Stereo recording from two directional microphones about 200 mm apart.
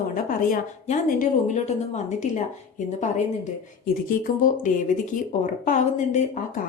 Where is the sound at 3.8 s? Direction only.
45° left (ahead or behind).